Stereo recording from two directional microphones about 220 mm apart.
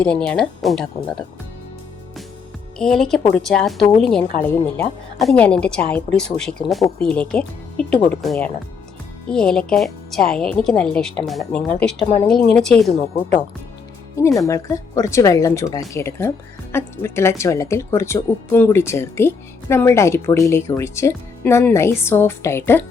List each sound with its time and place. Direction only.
0.0 s a woman's voice: 5° left (ahead or behind)
2.7 s a woman's voice: 5° left (ahead or behind)
3.8 s a woman's voice: 25° left (ahead or behind)
4.0 s a woman's voice: 5° left (ahead or behind)
14.2 s speech: 15° left (ahead or behind)